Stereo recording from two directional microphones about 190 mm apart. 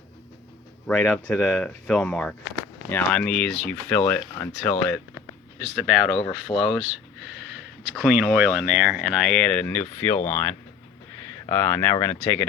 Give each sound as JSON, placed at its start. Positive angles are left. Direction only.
{"t": 0.9, "sound": "speech", "side_deg": 5}
{"t": 6.5, "sound": "speech", "side_deg": 25}
{"t": 7.9, "sound": "speech", "side_deg": -5}